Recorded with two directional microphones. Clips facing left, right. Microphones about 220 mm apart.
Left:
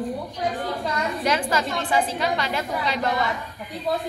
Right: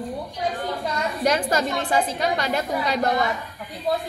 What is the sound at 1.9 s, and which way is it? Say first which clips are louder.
A woman's voice: right 1 dB; 45° right (ahead or behind).